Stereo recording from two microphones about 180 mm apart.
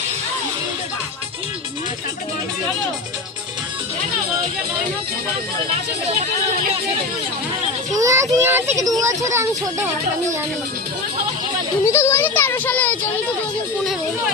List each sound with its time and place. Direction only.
7.9 s speech: 20° right (ahead or behind)
11.9 s speech: 15° left (ahead or behind)